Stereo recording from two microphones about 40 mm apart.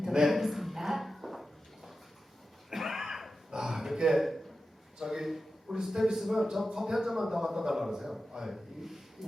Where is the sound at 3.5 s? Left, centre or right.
Centre.